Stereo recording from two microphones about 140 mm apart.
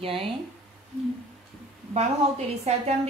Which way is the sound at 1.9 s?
50° right (ahead or behind).